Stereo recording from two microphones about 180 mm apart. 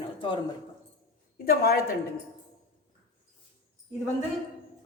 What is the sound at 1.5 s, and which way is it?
Speech, 60° left (ahead or behind).